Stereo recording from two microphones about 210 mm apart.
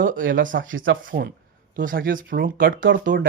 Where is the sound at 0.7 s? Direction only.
65° right (ahead or behind).